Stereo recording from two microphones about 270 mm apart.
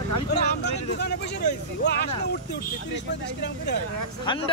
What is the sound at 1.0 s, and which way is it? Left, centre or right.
Speech, left.